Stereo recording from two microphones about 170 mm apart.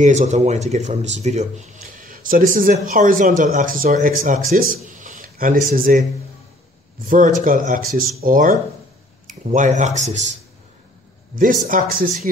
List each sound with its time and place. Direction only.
0.0 s speech: 45° right (ahead or behind)
4.8 s a sound: 50° right (ahead or behind)
7.1 s speech: 50° right (ahead or behind)
9.5 s speech: 45° right (ahead or behind)
11.6 s speech: 55° right (ahead or behind)